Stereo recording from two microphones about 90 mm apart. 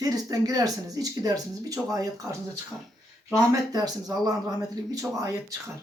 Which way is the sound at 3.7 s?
45° right (ahead or behind).